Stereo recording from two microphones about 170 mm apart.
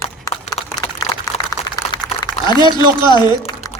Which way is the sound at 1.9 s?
25° left (ahead or behind).